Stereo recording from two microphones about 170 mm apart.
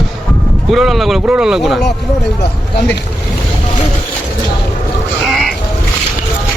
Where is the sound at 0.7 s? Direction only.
Centre (ahead or behind).